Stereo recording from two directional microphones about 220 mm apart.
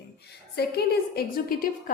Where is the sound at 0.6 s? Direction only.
45° left (ahead or behind).